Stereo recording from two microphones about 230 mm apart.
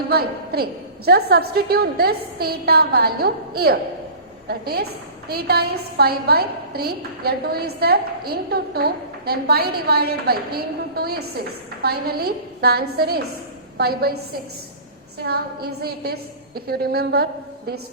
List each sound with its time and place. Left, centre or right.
0.1 s a woman's voice: right
15.2 s a woman's voice: right